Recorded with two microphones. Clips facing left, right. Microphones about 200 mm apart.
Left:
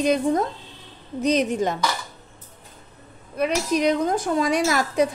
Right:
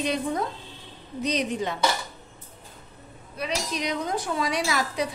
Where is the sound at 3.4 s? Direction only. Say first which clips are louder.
Left 9 dB; 50° left (ahead or behind).